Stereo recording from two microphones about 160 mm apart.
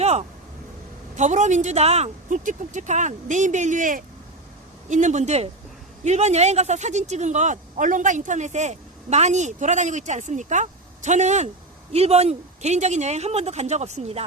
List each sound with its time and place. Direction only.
0.0 s vehicle: 40° right (ahead or behind)
1.1 s speech: 50° right (ahead or behind)